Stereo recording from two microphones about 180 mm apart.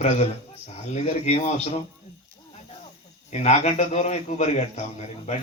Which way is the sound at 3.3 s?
40° left (ahead or behind).